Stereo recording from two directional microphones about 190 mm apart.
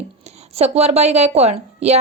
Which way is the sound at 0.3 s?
35° right (ahead or behind).